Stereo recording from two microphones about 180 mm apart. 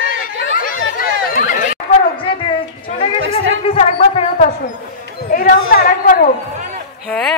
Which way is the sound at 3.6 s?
35° left (ahead or behind).